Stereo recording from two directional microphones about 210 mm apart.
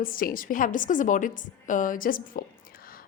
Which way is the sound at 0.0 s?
45° left (ahead or behind).